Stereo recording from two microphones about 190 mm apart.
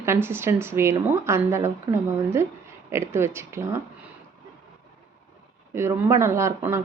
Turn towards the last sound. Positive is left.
turn(degrees=-15)  # may be behind; listen again after turning